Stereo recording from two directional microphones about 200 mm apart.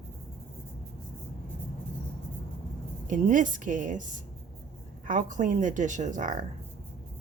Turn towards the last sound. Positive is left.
turn(degrees=-40)  # may be behind; listen again after turning